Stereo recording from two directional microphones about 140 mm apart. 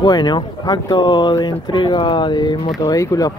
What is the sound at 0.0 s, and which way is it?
Speech, 30° left (ahead or behind).